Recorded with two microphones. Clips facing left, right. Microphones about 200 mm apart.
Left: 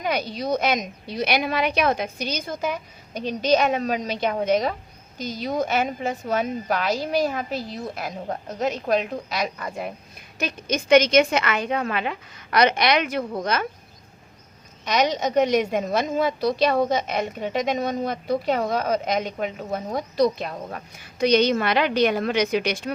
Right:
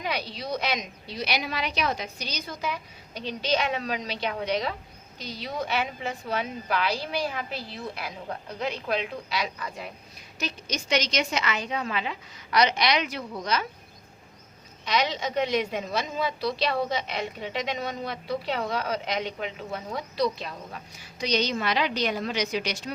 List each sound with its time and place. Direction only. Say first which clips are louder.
0.0 s a woman's voice: left 6 dB; 45° left (ahead or behind)
14.8 s a woman's voice: left 5 dB; 45° left (ahead or behind)